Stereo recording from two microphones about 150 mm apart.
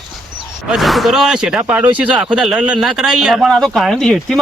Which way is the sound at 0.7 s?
Centre (ahead or behind).